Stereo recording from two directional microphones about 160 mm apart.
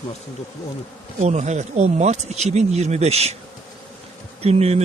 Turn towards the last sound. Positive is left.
turn(degrees=-40)  # may be behind; listen again after turning